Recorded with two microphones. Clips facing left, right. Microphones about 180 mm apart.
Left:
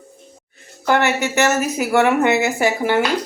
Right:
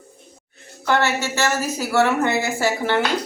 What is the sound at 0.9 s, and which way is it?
A woman's voice, 15° left (ahead or behind).